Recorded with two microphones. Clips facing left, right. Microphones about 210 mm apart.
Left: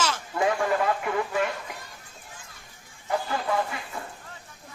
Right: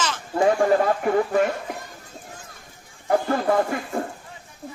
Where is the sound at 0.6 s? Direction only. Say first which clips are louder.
Right 6 dB; 40° right (ahead or behind).